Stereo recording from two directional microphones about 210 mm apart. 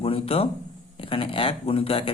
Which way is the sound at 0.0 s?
25° left (ahead or behind).